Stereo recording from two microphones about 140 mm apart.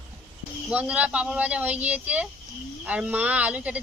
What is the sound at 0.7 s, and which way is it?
A woman's voice, 10° right (ahead or behind).